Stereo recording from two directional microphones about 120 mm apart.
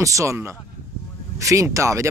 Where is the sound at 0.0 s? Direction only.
25° right (ahead or behind).